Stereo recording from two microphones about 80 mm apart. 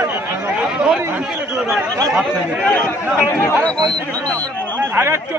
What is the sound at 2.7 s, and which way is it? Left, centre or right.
Speech, centre.